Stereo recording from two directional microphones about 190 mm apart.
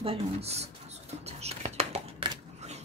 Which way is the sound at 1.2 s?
35° right (ahead or behind).